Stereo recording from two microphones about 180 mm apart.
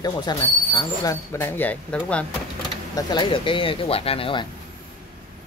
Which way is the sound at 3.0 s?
25° left (ahead or behind).